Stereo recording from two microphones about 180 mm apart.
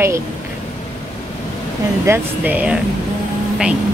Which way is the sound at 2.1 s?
10° right (ahead or behind).